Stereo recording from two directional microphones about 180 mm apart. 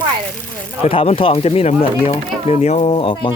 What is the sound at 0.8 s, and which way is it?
Speech, 30° left (ahead or behind).